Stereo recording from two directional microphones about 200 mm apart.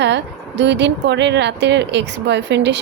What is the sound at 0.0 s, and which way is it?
Speech, 60° right (ahead or behind).